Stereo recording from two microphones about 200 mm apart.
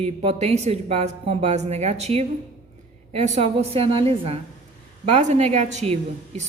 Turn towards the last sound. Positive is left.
turn(degrees=-35)  # may be behind; listen again after turning